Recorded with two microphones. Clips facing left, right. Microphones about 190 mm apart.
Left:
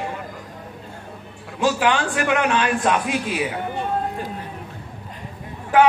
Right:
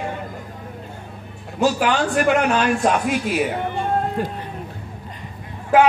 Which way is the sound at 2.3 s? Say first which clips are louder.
Right 1 dB; 45° right (ahead or behind).